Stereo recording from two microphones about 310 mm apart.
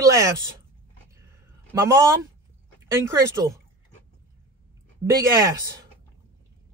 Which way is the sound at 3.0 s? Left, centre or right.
Centre.